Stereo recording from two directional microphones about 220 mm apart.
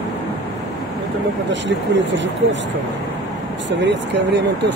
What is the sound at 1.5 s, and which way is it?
Speech, 55° right (ahead or behind).